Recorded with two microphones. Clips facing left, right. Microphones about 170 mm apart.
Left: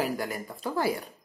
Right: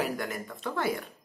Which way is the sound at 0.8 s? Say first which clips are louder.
Left 2 dB; 35° left (ahead or behind).